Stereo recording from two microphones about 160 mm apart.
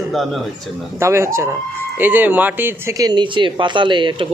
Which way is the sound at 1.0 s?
15° right (ahead or behind).